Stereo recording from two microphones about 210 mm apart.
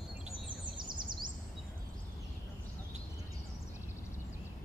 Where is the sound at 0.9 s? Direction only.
20° right (ahead or behind).